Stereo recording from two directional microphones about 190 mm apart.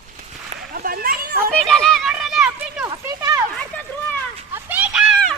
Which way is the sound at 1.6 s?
Centre (ahead or behind).